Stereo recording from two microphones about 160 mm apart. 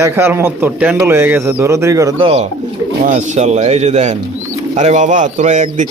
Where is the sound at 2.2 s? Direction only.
40° right (ahead or behind).